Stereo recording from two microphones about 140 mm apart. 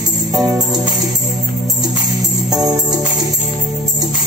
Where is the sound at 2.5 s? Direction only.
30° right (ahead or behind).